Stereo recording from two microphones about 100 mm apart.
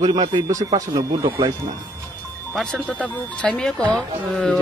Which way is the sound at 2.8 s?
10° left (ahead or behind).